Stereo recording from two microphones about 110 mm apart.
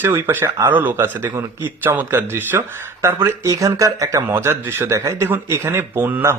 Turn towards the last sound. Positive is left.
turn(degrees=-20)  # may be behind; listen again after turning